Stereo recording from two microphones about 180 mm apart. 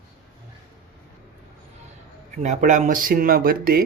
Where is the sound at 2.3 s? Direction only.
45° right (ahead or behind).